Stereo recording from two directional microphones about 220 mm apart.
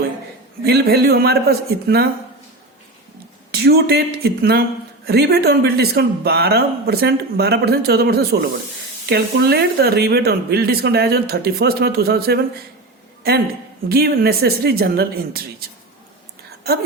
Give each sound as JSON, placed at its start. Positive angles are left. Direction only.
{"t": 0.6, "sound": "speech", "side_deg": -45}
{"t": 3.5, "sound": "speech", "side_deg": -45}
{"t": 13.8, "sound": "speech", "side_deg": -45}